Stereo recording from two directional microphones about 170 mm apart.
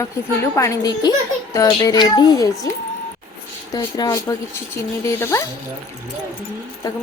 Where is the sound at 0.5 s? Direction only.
20° left (ahead or behind).